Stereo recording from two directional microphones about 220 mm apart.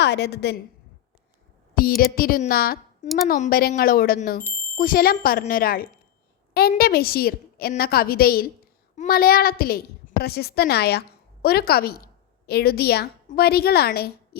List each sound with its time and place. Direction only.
0.0 s a woman's voice: 50° left (ahead or behind)
1.7 s a woman's voice: 40° left (ahead or behind)